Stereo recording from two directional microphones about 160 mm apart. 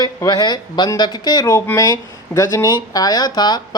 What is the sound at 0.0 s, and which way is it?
Speech, 25° left (ahead or behind).